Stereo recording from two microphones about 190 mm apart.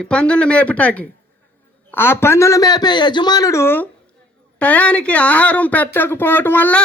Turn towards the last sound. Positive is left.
turn(degrees=10)  # may be behind; listen again after turning